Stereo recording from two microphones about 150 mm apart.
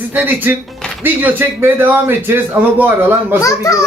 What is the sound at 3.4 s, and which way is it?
Speech, 20° left (ahead or behind).